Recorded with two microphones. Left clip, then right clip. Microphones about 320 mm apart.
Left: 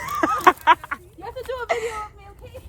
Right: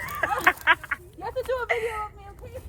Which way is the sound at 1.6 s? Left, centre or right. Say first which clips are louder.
Left 2 dB; centre.